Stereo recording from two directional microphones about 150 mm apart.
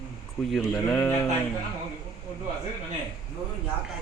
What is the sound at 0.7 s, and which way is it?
Speech, 15° left (ahead or behind).